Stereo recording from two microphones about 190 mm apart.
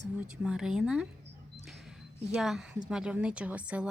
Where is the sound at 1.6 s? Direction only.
Centre (ahead or behind).